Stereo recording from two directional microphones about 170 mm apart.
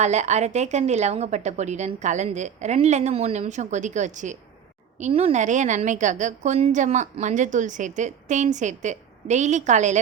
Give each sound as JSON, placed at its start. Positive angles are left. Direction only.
{"t": 0.0, "sound": "a woman's voice", "side_deg": -40}